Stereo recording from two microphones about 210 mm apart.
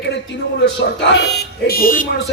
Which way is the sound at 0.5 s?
55° left (ahead or behind).